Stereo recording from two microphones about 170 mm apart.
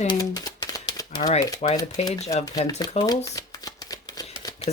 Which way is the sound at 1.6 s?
40° left (ahead or behind).